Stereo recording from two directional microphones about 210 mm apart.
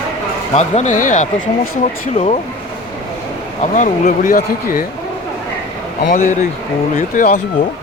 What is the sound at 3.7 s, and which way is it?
Speech, 35° left (ahead or behind).